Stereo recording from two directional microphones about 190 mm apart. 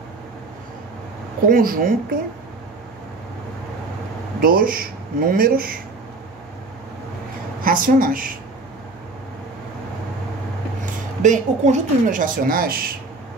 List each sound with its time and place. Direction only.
1.5 s speech: 50° right (ahead or behind)
4.4 s speech: 50° right (ahead or behind)
7.6 s speech: 45° right (ahead or behind)
11.2 s speech: 40° right (ahead or behind)